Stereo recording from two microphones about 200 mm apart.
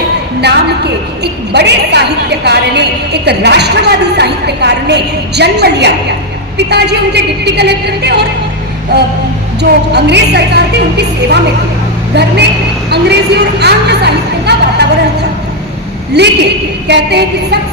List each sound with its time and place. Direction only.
1.2 s a woman's voice: 55° right (ahead or behind)
12.9 s a woman's voice: 55° right (ahead or behind)
16.1 s a woman's voice: 55° right (ahead or behind)